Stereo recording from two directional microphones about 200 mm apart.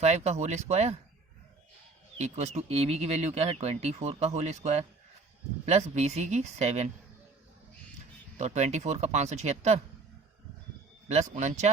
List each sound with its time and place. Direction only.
0.0 s speech: 35° right (ahead or behind)
2.1 s speech: 35° right (ahead or behind)
8.4 s speech: 35° right (ahead or behind)
11.1 s speech: 35° right (ahead or behind)